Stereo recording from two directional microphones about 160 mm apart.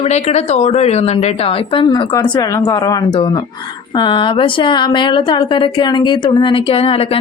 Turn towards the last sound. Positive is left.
turn(degrees=35)  # may be behind; listen again after turning